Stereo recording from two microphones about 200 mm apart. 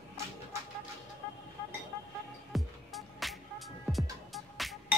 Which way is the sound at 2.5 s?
Centre (ahead or behind).